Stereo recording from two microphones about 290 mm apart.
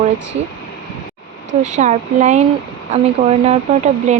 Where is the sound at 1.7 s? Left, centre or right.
Right.